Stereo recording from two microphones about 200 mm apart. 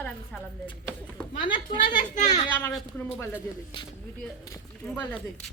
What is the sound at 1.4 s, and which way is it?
Speech, 25° left (ahead or behind).